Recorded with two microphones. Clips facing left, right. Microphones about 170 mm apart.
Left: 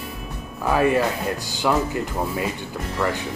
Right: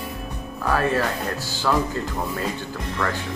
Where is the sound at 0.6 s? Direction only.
15° left (ahead or behind).